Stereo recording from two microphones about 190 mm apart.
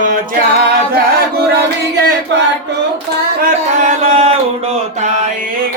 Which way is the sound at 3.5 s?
40° right (ahead or behind).